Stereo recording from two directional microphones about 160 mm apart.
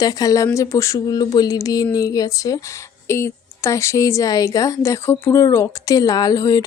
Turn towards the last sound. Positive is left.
turn(degrees=20)  # may be behind; listen again after turning